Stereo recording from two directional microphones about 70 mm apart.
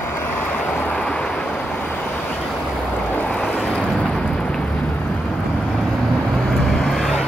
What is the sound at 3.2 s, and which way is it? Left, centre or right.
Waves, centre.